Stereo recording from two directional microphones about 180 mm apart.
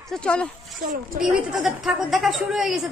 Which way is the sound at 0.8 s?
50° right (ahead or behind).